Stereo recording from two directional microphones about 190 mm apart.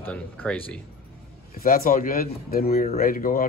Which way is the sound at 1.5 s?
50° left (ahead or behind).